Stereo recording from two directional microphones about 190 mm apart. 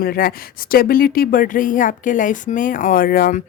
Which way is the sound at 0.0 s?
50° left (ahead or behind).